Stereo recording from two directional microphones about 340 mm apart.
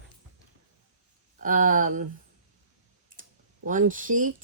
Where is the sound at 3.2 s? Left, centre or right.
Right.